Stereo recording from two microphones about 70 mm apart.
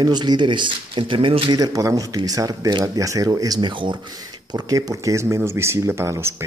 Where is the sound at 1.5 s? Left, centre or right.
Right.